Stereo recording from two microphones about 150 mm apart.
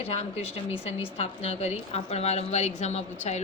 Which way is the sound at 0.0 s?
40° left (ahead or behind).